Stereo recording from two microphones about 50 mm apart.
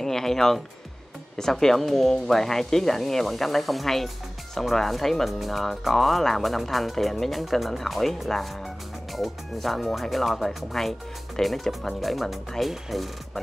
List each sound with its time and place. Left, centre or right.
0.0 s speech: centre